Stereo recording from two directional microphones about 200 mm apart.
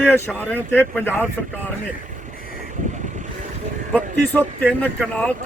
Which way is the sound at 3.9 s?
10° left (ahead or behind).